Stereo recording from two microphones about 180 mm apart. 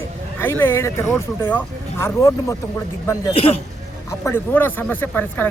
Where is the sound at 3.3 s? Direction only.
35° left (ahead or behind).